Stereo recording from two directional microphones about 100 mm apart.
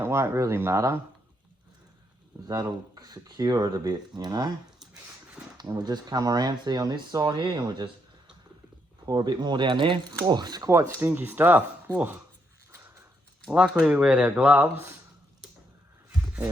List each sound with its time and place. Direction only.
0.0 s speech: 30° right (ahead or behind)
2.5 s speech: 40° right (ahead or behind)
5.5 s speech: 40° right (ahead or behind)
9.0 s speech: 45° right (ahead or behind)
10.7 s speech: 25° right (ahead or behind)
13.5 s speech: 10° right (ahead or behind)